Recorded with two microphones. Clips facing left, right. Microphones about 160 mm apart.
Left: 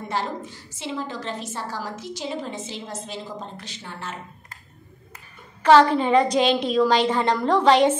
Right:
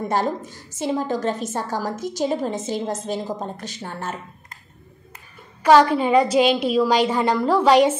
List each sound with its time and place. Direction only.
0.1 s a woman's voice: 45° right (ahead or behind)
5.6 s a woman's voice: 10° right (ahead or behind)